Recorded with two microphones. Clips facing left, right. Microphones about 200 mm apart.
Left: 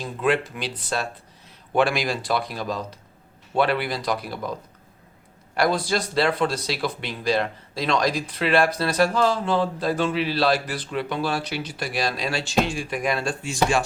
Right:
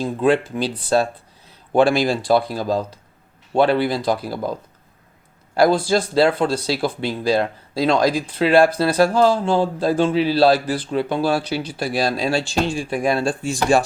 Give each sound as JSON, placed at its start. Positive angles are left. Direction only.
{"t": 0.0, "sound": "speech", "side_deg": -30}
{"t": 5.6, "sound": "speech", "side_deg": -30}